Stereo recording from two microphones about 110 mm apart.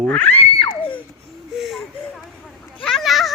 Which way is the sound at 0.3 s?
65° left (ahead or behind).